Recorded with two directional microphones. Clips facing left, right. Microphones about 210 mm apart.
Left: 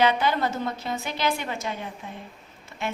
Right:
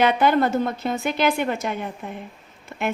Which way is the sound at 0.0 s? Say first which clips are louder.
Right 4 dB; 55° right (ahead or behind).